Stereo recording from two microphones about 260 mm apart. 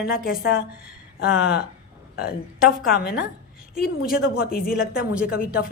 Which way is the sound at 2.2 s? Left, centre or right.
Left.